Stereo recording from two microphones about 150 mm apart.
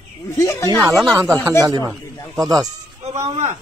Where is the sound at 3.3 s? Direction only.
50° right (ahead or behind).